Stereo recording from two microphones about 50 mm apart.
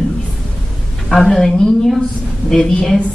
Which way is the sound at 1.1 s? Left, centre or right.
Centre.